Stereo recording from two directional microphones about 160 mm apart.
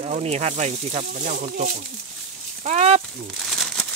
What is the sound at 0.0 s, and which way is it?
Speech, 40° right (ahead or behind).